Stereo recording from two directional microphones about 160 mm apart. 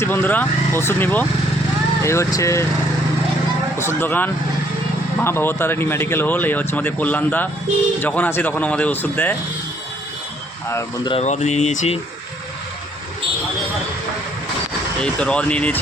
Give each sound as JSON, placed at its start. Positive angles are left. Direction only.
{"t": 0.0, "sound": "speech", "side_deg": 15}
{"t": 3.8, "sound": "speech", "side_deg": 15}
{"t": 10.7, "sound": "speech", "side_deg": 20}
{"t": 11.1, "sound": "speech", "side_deg": 45}
{"t": 15.0, "sound": "speech", "side_deg": 5}